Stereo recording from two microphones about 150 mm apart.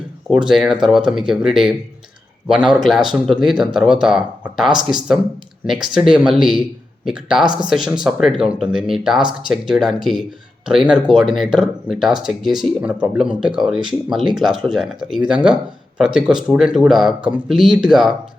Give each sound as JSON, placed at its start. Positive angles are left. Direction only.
{"t": 0.3, "sound": "speech", "side_deg": 0}
{"t": 7.4, "sound": "speech", "side_deg": -30}
{"t": 7.7, "sound": "speech", "side_deg": -5}